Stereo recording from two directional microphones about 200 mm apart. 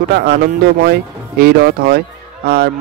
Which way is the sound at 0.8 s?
50° right (ahead or behind).